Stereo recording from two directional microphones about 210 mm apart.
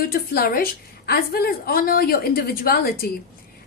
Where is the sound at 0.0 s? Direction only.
45° left (ahead or behind).